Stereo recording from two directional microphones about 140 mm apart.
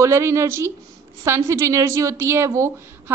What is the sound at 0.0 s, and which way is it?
A woman's voice, 20° right (ahead or behind).